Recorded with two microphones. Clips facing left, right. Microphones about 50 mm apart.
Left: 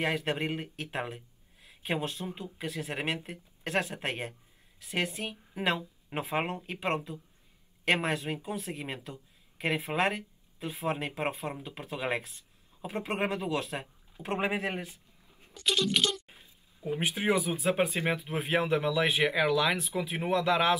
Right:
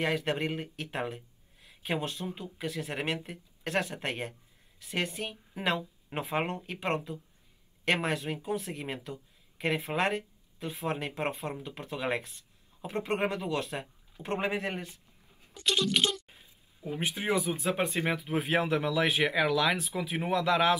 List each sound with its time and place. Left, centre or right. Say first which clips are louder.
0.0 s speech: right 1 dB; centre
16.3 s a sound: left 1 dB; centre
17.3 s speech: left 1 dB; centre